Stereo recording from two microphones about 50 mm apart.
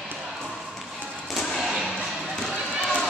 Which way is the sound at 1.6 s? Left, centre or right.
Centre.